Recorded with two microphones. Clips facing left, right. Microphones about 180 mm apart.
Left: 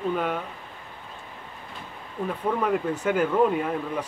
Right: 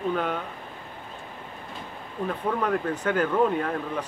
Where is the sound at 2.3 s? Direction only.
10° left (ahead or behind).